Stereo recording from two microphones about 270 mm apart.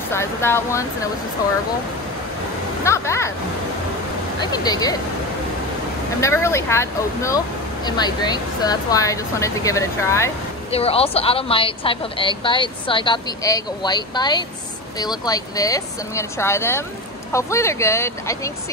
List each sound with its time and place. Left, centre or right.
0.1 s speech: centre
2.8 s speech: centre
4.4 s speech: centre
6.2 s speech: centre
10.7 s a woman's voice: left